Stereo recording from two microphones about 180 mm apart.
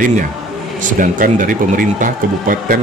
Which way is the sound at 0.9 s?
50° right (ahead or behind).